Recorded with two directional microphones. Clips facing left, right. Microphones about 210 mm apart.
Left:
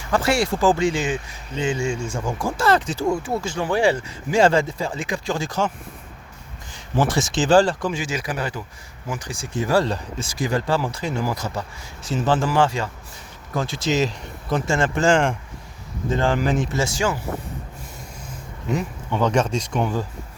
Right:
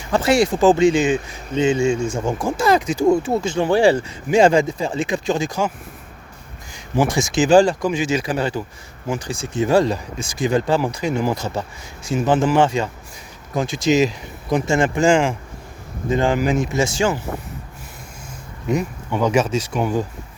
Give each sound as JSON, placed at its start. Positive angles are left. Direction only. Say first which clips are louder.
{"t": 0.0, "sound": "speech", "louder": "right 4 dB", "side_deg": -20}
{"t": 4.3, "sound": "speech", "louder": "right 3 dB", "side_deg": -15}
{"t": 6.7, "sound": "speech", "louder": "right 2 dB", "side_deg": -10}
{"t": 18.7, "sound": "speech", "louder": "right 3 dB", "side_deg": -15}